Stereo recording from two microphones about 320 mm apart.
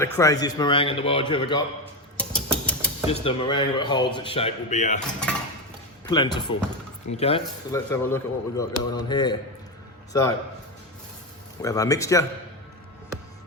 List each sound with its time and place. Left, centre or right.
0.0 s speech: centre
2.1 s a sound: centre
3.1 s speech: centre
6.1 s speech: centre
7.9 s speech: centre
11.6 s speech: centre